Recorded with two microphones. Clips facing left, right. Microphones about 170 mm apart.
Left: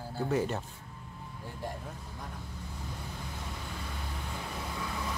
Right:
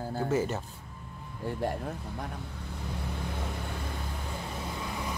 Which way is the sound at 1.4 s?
65° right (ahead or behind).